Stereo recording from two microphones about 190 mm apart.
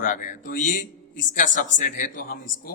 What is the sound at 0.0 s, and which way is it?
A man's voice, 45° left (ahead or behind).